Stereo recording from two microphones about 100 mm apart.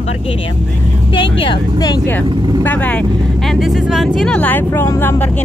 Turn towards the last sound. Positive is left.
turn(degrees=20)  # may be behind; listen again after turning